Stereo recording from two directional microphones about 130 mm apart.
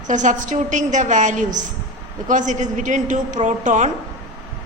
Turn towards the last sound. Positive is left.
turn(degrees=-65)  # may be behind; listen again after turning